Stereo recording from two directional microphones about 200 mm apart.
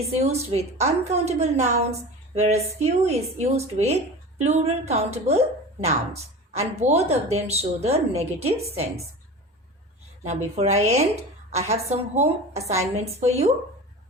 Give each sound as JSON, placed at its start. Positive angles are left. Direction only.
{"t": 0.0, "sound": "a woman's voice", "side_deg": -30}
{"t": 6.6, "sound": "a woman's voice", "side_deg": -35}
{"t": 10.2, "sound": "a woman's voice", "side_deg": -35}